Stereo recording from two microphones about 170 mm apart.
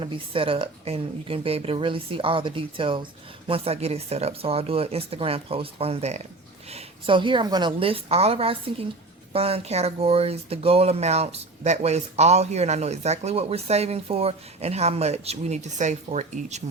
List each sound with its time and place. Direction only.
0.0 s speech: 30° right (ahead or behind)